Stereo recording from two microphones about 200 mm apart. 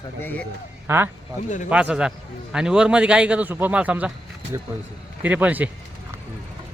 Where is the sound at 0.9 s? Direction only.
10° right (ahead or behind).